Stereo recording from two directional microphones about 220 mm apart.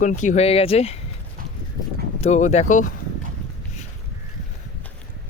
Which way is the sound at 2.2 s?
30° left (ahead or behind).